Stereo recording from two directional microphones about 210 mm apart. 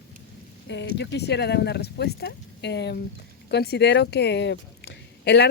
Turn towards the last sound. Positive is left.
turn(degrees=55)  # may be behind; listen again after turning